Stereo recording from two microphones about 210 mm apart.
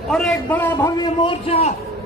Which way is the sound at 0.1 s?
Centre (ahead or behind).